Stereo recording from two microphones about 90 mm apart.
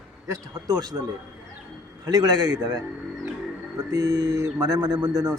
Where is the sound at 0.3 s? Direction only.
45° right (ahead or behind).